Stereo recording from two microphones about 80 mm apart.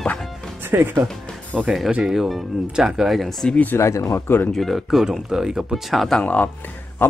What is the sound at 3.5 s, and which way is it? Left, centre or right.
Speech, left.